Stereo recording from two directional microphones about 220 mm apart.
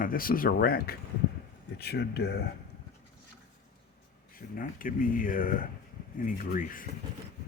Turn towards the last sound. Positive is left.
turn(degrees=40)  # may be behind; listen again after turning